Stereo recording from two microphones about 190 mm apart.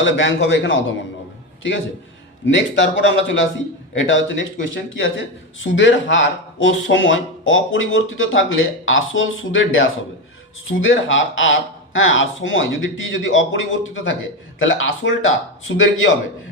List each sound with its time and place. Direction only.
0.0 s a man's voice: 80° left
2.5 s a man's voice: 75° left (ahead or behind)